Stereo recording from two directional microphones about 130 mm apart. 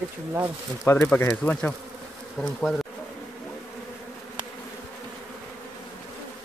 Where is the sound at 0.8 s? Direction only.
20° left (ahead or behind).